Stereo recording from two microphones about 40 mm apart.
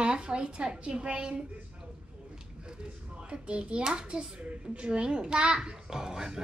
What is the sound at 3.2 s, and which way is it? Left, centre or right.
A child's voice, right.